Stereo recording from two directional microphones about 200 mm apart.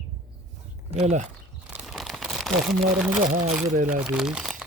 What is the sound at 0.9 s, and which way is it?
Speech, 35° right (ahead or behind).